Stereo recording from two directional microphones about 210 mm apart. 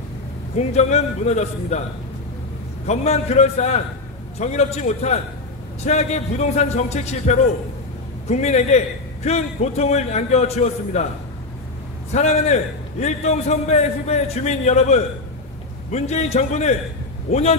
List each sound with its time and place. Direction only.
0.6 s a man's voice: 30° left (ahead or behind)
2.9 s a man's voice: 30° left (ahead or behind)
12.1 s a man's voice: 35° left (ahead or behind)